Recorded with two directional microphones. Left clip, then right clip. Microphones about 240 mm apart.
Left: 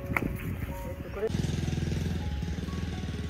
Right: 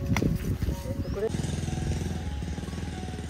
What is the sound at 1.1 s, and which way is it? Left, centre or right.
Vehicle, right.